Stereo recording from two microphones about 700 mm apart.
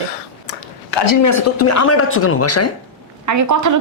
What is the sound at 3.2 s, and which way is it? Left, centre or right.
Speech, right.